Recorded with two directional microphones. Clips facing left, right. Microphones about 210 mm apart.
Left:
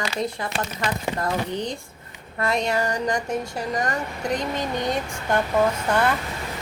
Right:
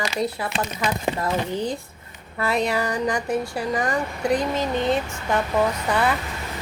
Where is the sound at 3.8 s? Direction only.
5° right (ahead or behind).